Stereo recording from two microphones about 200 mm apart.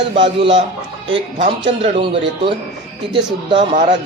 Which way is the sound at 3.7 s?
40° right (ahead or behind).